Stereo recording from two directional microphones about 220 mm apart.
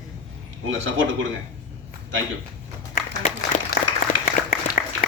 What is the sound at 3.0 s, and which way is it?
Applause, 40° left (ahead or behind).